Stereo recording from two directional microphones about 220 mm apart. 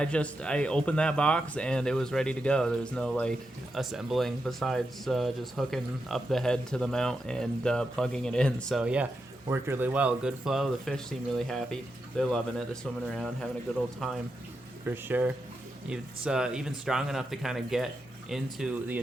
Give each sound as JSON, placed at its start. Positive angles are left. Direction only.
{"t": 0.0, "sound": "speech", "side_deg": 5}